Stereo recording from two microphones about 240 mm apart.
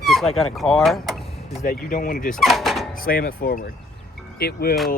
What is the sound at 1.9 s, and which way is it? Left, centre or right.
Speech, left.